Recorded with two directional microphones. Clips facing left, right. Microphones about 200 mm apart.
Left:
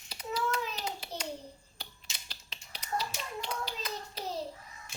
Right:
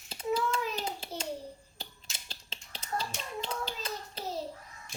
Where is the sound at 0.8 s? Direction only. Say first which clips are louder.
Right 2 dB; 25° right (ahead or behind).